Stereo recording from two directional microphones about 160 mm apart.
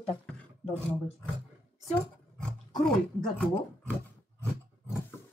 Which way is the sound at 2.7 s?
5° left (ahead or behind).